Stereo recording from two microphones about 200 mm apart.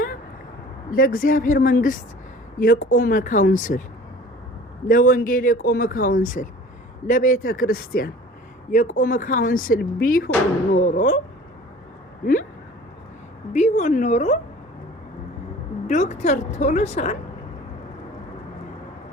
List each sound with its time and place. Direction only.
0.9 s a woman's voice: 45° left (ahead or behind)
4.9 s speech: 45° left (ahead or behind)
12.2 s speech: 45° left (ahead or behind)
13.5 s a woman's voice: 35° left (ahead or behind)
15.9 s a woman's voice: 35° left (ahead or behind)